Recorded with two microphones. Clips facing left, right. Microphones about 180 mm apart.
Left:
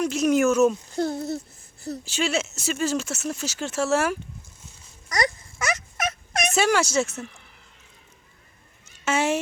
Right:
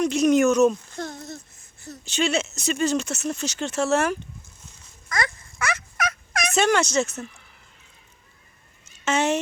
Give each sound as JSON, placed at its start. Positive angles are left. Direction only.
{"t": 0.0, "sound": "speech", "side_deg": 5}
{"t": 0.9, "sound": "speech", "side_deg": 35}
{"t": 2.0, "sound": "speech", "side_deg": 5}
{"t": 5.0, "sound": "fowl", "side_deg": 20}
{"t": 6.5, "sound": "speech", "side_deg": 5}
{"t": 9.0, "sound": "speech", "side_deg": 10}